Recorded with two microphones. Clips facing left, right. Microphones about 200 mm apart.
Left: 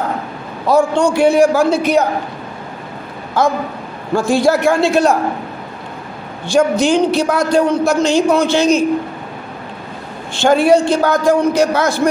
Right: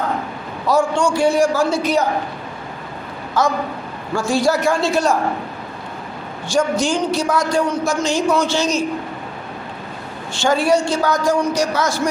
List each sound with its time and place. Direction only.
0.7 s speech: 55° left (ahead or behind)
3.4 s speech: 55° left (ahead or behind)
6.5 s speech: 60° left (ahead or behind)
10.4 s speech: 55° left (ahead or behind)